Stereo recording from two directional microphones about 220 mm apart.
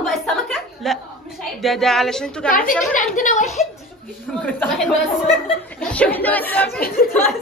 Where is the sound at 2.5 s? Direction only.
40° left (ahead or behind).